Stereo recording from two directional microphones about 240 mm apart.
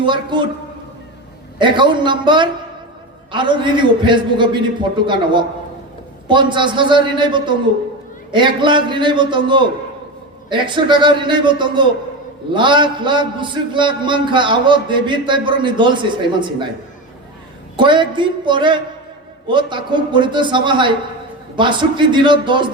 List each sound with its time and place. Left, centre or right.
0.0 s a man's voice: centre
1.5 s a man's voice: centre
17.7 s a man's voice: centre